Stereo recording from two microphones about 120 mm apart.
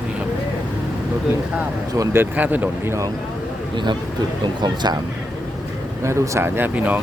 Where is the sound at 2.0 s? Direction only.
20° right (ahead or behind).